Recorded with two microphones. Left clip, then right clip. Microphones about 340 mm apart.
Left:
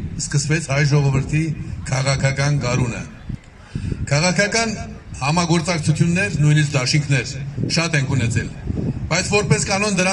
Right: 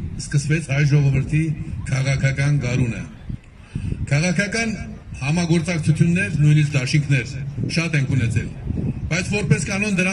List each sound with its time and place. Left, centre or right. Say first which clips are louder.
0.5 s a man's voice: left 2 dB; centre
4.1 s a man's voice: left 4 dB; centre